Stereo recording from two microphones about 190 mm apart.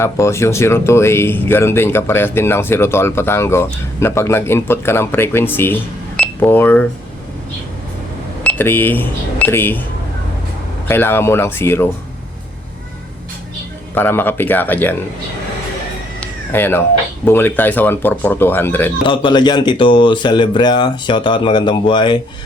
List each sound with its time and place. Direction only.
0.0 s speech: 15° left (ahead or behind)
8.4 s speech: 10° left (ahead or behind)
10.8 s speech: 10° left (ahead or behind)
13.9 s speech: 10° left (ahead or behind)
16.2 s cat: 10° left (ahead or behind)
17.2 s speech: 10° left (ahead or behind)
19.0 s speech: 25° left (ahead or behind)